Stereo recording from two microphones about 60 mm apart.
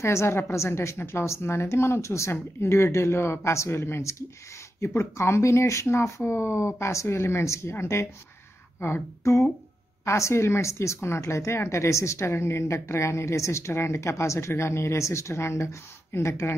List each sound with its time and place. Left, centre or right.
0.0 s speech: left
8.8 s a sound: left
10.0 s speech: left